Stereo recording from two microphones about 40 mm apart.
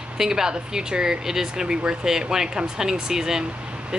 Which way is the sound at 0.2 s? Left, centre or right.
Centre.